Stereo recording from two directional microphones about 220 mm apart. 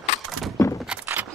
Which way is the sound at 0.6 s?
15° left (ahead or behind).